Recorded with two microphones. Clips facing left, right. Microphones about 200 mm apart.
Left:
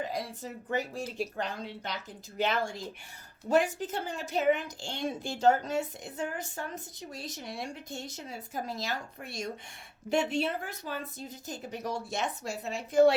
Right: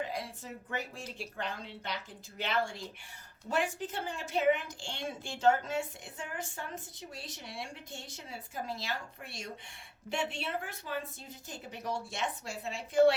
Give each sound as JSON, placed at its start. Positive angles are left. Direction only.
{"t": 0.0, "sound": "a woman's voice", "side_deg": 40}